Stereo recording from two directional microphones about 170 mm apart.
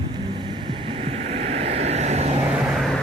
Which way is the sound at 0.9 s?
35° right (ahead or behind).